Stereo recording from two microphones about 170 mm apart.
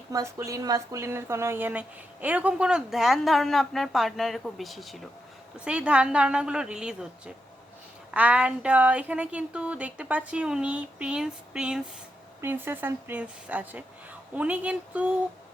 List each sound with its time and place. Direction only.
0.1 s a woman's voice: 20° right (ahead or behind)